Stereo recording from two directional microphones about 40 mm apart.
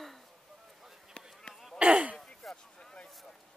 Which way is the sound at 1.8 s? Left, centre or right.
Right.